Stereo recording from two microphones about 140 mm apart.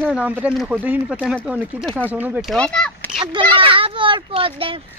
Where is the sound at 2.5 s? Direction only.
5° left (ahead or behind).